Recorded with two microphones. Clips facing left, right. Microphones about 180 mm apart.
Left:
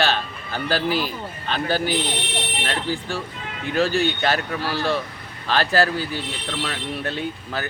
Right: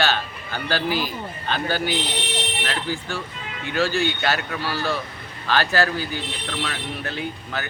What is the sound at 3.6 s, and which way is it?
Speech, 35° left (ahead or behind).